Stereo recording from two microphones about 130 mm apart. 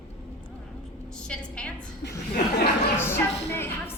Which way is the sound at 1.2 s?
10° left (ahead or behind).